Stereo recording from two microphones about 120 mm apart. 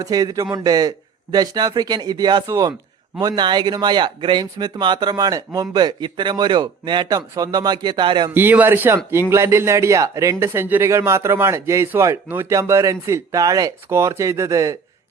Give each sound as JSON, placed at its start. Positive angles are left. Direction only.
{"t": 0.0, "sound": "speech", "side_deg": -30}
{"t": 8.3, "sound": "a man's voice", "side_deg": -15}